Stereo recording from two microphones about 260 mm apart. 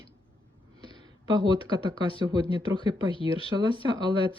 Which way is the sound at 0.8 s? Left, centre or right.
Centre.